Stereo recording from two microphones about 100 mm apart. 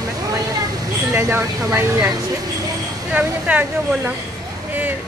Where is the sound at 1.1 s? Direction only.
20° right (ahead or behind).